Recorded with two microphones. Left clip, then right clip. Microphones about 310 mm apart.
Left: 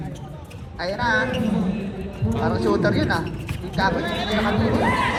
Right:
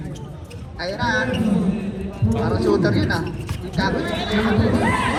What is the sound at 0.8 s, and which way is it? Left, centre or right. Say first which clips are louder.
Speech: even; left.